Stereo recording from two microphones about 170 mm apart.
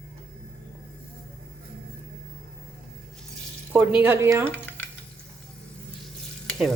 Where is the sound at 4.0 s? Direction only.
15° right (ahead or behind).